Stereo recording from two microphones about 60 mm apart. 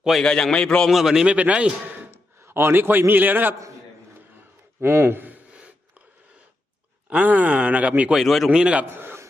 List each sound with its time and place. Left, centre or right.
0.2 s a man's voice: centre
0.9 s speech: centre
1.4 s speech: right
2.0 s a sound: right
3.1 s a man's voice: right
4.8 s a man's voice: right
7.1 s speech: right
8.1 s speech: centre
8.4 s speech: centre